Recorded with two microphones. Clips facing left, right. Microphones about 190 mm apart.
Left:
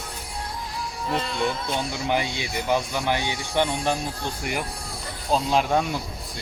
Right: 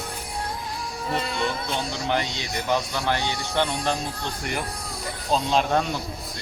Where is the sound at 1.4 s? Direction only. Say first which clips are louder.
Left 1 dB; 15° left (ahead or behind).